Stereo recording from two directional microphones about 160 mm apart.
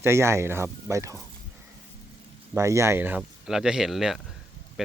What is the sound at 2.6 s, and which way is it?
Speech, 20° right (ahead or behind).